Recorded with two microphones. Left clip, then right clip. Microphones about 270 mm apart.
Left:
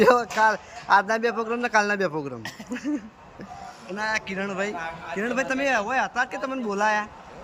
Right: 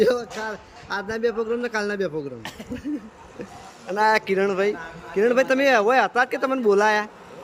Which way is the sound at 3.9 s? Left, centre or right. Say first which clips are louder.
Right 8 dB; centre.